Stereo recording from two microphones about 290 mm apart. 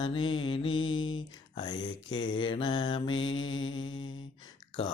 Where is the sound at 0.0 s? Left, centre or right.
Centre.